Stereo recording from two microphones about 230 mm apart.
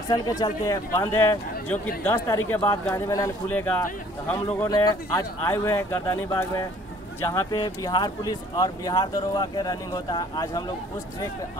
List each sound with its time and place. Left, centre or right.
0.1 s speech: centre